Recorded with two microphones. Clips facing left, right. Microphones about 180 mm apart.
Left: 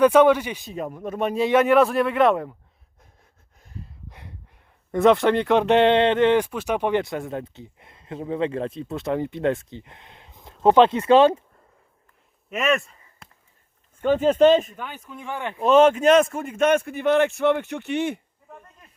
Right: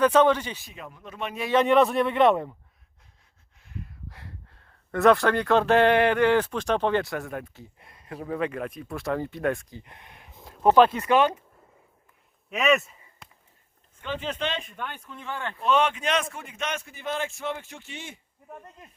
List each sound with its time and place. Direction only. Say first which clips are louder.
0.0 s speech: left 4 dB; 10° left (ahead or behind)
0.7 s speech: left 12 dB; 45° left (ahead or behind)
1.6 s speech: left 2 dB; centre (ahead or behind)
3.6 s a sound: right 1 dB; 40° left (ahead or behind)
4.1 s speech: left 1 dB; 20° left (ahead or behind)
6.5 s speech: left 1 dB; 10° left (ahead or behind); by 11.4 s 25° left (ahead or behind)
12.5 s a sound: even; centre (ahead or behind)
14.0 s speech: left 15 dB; 45° left (ahead or behind)
14.7 s speech: left 1 dB; 5° left (ahead or behind)
15.6 s speech: left 9 dB; 45° left (ahead or behind); by 18.2 s 65° left (ahead or behind)
18.5 s goat: right 2 dB; 20° right (ahead or behind)